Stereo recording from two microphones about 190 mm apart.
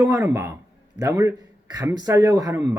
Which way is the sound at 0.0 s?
15° right (ahead or behind).